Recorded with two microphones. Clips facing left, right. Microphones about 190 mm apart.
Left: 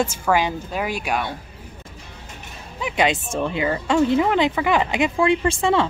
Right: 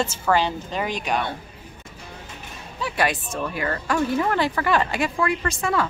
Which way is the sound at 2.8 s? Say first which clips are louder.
Left 3 dB; 20° left (ahead or behind).